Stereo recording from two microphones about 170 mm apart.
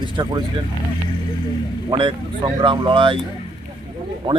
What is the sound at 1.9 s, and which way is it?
Speech, 30° right (ahead or behind).